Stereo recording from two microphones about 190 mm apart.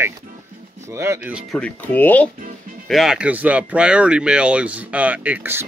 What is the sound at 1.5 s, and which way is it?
Speech, 5° left (ahead or behind).